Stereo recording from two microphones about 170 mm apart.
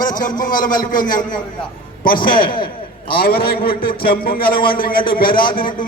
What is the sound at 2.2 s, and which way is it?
A man's voice, 55° left (ahead or behind).